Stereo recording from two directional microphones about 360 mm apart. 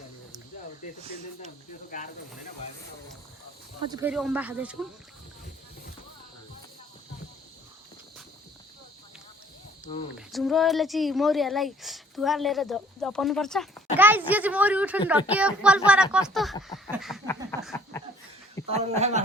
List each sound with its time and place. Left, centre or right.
3.8 s speech: centre
10.2 s speech: centre
18.7 s speech: centre